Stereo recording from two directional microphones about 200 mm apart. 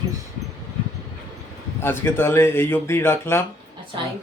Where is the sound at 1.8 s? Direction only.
10° left (ahead or behind).